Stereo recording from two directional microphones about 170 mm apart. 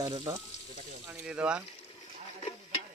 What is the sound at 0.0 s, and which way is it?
Speech, 20° right (ahead or behind).